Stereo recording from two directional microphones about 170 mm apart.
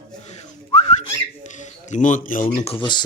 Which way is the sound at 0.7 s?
35° left (ahead or behind).